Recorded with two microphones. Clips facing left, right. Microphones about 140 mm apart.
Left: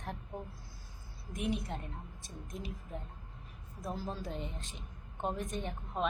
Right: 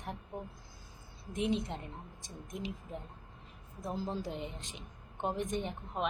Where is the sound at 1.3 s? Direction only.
25° right (ahead or behind).